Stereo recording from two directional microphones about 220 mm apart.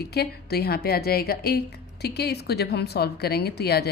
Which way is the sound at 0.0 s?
45° left (ahead or behind).